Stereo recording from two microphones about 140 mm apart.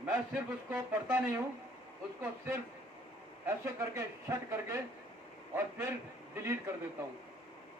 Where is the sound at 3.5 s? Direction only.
20° right (ahead or behind).